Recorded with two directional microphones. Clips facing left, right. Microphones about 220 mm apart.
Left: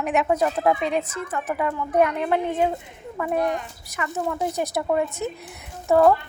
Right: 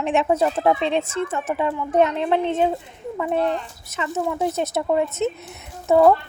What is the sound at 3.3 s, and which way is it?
Speech, 15° left (ahead or behind).